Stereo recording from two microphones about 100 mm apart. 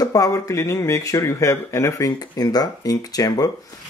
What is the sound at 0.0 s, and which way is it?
Speech, 35° left (ahead or behind).